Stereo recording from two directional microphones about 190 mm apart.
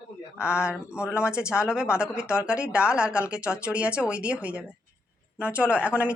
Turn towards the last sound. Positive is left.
turn(degrees=-5)  # may be behind; listen again after turning